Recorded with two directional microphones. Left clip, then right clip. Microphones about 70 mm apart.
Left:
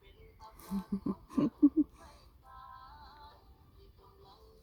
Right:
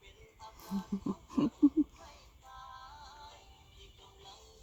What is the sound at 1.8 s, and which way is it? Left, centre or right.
Music, left.